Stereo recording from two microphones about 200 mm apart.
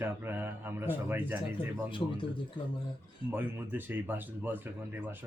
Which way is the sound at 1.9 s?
25° left (ahead or behind).